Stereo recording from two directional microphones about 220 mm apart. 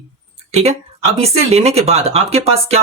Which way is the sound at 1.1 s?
30° right (ahead or behind).